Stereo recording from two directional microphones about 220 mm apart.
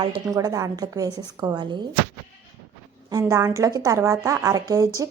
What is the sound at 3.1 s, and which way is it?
A woman's voice, 15° right (ahead or behind).